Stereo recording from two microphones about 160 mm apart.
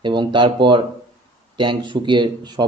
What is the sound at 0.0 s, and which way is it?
Speech, 30° right (ahead or behind).